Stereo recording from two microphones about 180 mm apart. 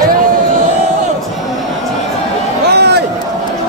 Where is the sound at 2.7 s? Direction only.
65° right (ahead or behind).